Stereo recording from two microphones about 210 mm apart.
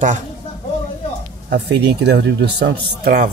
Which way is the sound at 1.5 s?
55° right (ahead or behind).